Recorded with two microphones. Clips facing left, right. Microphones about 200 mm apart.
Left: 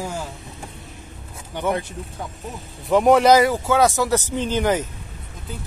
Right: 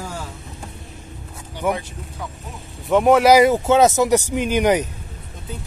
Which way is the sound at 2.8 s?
Centre (ahead or behind).